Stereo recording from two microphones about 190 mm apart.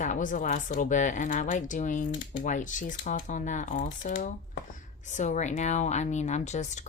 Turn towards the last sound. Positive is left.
turn(degrees=35)  # may be behind; listen again after turning